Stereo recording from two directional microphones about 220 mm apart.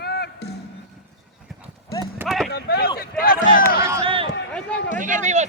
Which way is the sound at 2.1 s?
Centre (ahead or behind).